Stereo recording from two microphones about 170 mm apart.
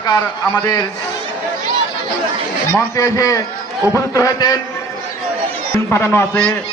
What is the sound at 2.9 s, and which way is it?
A man's voice, 20° left (ahead or behind).